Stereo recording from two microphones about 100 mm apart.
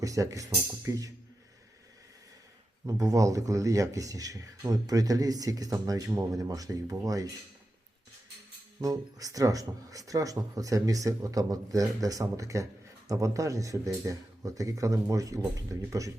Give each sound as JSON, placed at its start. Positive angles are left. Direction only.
{"t": 0.0, "sound": "speech", "side_deg": -35}
{"t": 2.8, "sound": "speech", "side_deg": -35}
{"t": 8.8, "sound": "speech", "side_deg": -35}